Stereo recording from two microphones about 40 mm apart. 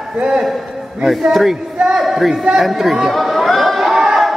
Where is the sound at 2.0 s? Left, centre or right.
Centre.